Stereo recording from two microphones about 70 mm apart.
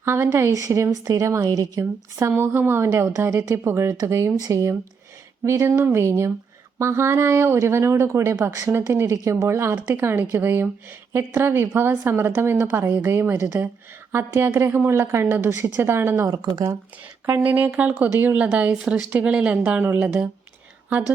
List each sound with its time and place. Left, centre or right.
0.0 s a woman's voice: right
1.8 s a woman's voice: right
2.3 s a woman's voice: right
5.5 s a woman's voice: right
9.0 s a woman's voice: right
9.5 s a woman's voice: right
16.2 s speech: right
17.4 s speech: right